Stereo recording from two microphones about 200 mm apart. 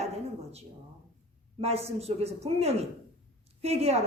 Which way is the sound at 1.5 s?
30° right (ahead or behind).